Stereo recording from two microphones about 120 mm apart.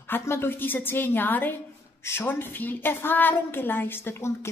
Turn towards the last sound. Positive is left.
turn(degrees=20)  # may be behind; listen again after turning